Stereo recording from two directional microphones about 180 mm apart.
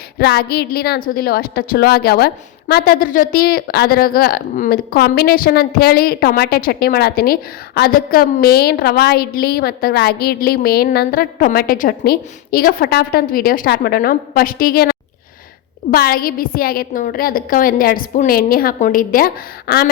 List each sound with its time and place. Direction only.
0.2 s a woman's voice: 60° left (ahead or behind)